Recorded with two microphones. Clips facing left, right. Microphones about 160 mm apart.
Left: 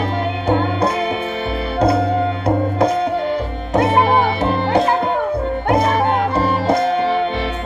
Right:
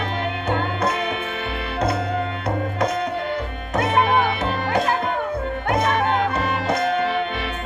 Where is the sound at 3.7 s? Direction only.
30° left (ahead or behind).